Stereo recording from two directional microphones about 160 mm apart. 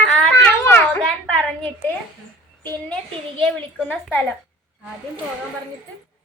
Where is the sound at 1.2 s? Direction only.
5° left (ahead or behind).